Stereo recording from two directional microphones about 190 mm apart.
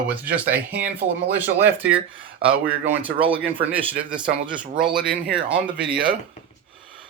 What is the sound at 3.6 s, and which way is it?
A man's voice, 5° right (ahead or behind).